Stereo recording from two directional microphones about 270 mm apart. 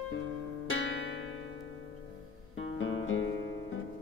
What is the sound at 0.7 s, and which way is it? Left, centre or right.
Music, left.